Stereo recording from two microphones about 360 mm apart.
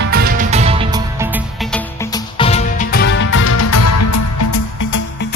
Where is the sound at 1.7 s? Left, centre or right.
Centre; by 3.5 s left.